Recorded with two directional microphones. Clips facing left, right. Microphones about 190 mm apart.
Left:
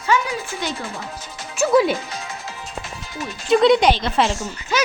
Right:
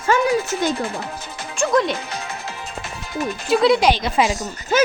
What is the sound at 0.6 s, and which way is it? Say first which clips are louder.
Speech: right 6 dB; 60° right (ahead or behind).